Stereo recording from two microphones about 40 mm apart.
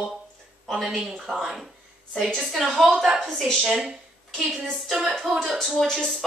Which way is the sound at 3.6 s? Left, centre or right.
Centre.